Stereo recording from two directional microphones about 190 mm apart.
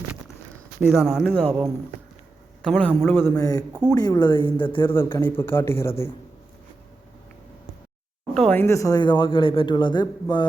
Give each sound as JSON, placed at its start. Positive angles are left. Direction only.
{"t": 0.9, "sound": "speech", "side_deg": 0}
{"t": 2.6, "sound": "a man's voice", "side_deg": 5}
{"t": 4.9, "sound": "a man's voice", "side_deg": 10}
{"t": 8.3, "sound": "a woman's voice", "side_deg": 5}